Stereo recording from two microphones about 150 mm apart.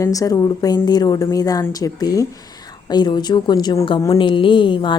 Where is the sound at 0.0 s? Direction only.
25° left (ahead or behind).